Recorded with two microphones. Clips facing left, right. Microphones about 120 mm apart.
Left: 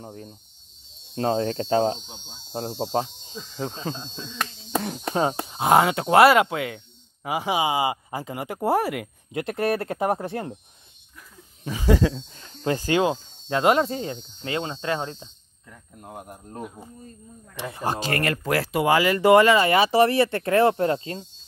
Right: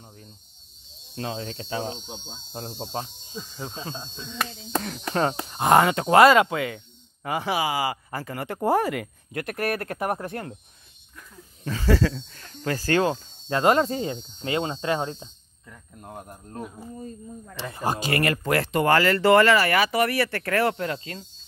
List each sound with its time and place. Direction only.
0.0 s cricket: 50° left (ahead or behind)
1.1 s speech: 40° left (ahead or behind)
3.4 s speech: 5° right (ahead or behind)
4.8 s speech: 30° left (ahead or behind)
5.5 s speech: 5° left (ahead or behind)
8.5 s speech: 5° left (ahead or behind)
9.3 s speech: 25° left (ahead or behind)
11.6 s speech: 15° left (ahead or behind)
13.5 s speech: 5° left (ahead or behind)
14.4 s speech: 20° right (ahead or behind)
15.0 s speech: 10° right (ahead or behind)
15.7 s speech: 5° left (ahead or behind)
18.0 s speech: 5° right (ahead or behind); by 21.3 s 30° left (ahead or behind)